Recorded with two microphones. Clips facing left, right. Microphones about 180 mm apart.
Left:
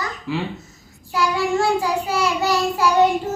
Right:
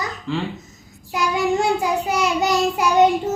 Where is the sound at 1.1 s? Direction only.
20° right (ahead or behind).